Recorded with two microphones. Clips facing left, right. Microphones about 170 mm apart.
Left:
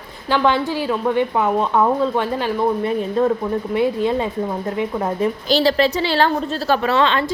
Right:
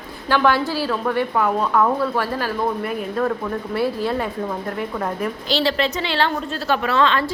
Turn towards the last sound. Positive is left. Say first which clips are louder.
# left 1 dB
turn(degrees=25)  # may be behind; listen again after turning